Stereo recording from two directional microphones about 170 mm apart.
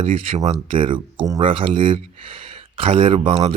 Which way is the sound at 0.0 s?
35° right (ahead or behind).